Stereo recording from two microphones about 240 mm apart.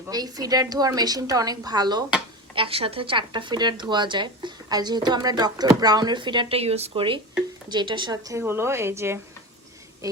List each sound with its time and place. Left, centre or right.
0.1 s a woman's voice: centre